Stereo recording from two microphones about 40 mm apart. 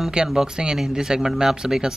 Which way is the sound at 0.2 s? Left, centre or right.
Right.